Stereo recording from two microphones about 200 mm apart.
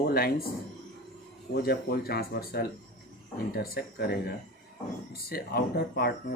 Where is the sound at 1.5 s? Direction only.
50° left (ahead or behind).